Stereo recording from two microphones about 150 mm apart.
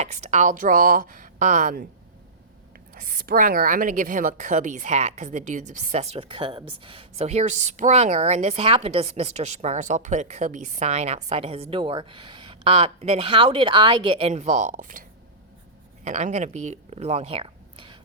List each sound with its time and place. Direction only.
0.0 s speech: 50° right (ahead or behind); by 1.9 s 70° right (ahead or behind)
2.9 s a woman's voice: 65° right (ahead or behind)
16.0 s speech: 50° right (ahead or behind); by 17.9 s 35° right (ahead or behind)